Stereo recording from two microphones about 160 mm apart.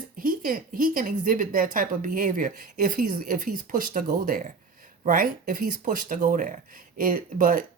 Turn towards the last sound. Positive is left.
turn(degrees=-60)  # may be behind; listen again after turning